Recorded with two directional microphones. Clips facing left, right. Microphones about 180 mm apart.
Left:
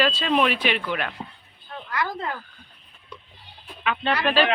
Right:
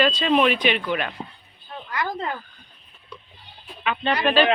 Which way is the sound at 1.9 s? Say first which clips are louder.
Right 1 dB; 15° right (ahead or behind).